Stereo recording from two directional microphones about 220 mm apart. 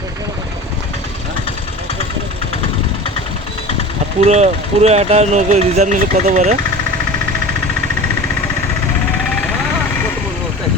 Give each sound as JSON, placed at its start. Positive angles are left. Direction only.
{"t": 4.2, "sound": "speech", "side_deg": -30}